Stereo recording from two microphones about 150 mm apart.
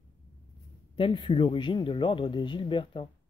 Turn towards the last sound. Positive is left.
turn(degrees=35)  # may be behind; listen again after turning